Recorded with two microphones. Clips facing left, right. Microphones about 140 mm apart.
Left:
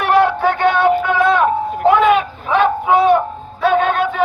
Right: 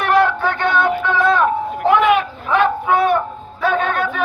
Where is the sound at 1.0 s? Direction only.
15° left (ahead or behind).